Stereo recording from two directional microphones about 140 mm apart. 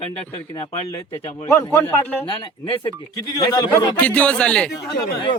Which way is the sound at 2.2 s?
40° left (ahead or behind).